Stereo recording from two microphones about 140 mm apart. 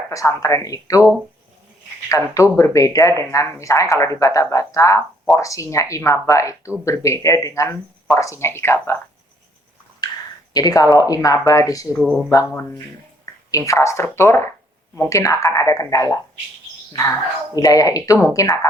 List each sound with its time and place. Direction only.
0.1 s speech: 20° left (ahead or behind)
2.0 s speech: 20° left (ahead or behind)
10.0 s a sound: 30° left (ahead or behind)
10.5 s speech: 25° left (ahead or behind)
11.9 s speech: centre (ahead or behind)
13.5 s speech: 20° left (ahead or behind)
17.5 s speech: 25° left (ahead or behind)